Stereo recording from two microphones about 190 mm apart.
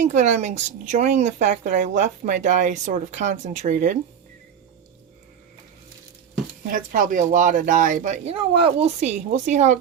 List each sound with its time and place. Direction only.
0.0 s speech: 40° right (ahead or behind)
6.7 s speech: 45° right (ahead or behind)